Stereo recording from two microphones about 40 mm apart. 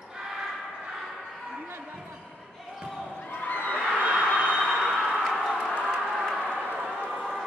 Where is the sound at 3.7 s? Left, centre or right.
Left.